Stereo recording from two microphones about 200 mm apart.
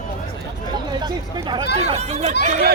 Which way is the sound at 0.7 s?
20° right (ahead or behind).